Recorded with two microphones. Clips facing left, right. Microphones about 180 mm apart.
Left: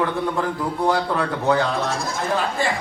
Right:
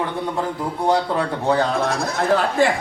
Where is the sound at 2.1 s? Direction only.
70° right (ahead or behind).